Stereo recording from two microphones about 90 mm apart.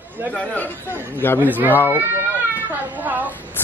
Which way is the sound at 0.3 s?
15° left (ahead or behind).